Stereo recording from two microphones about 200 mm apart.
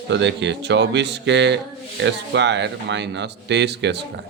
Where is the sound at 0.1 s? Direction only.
60° right (ahead or behind).